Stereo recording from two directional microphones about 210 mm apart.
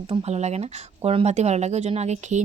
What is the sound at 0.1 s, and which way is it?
Speech, 30° right (ahead or behind).